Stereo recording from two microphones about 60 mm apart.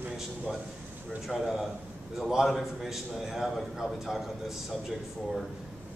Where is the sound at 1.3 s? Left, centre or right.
Centre.